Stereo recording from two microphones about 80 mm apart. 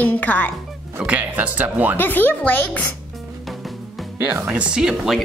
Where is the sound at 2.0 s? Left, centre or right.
Left.